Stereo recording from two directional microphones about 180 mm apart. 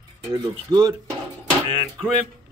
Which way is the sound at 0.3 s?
20° right (ahead or behind).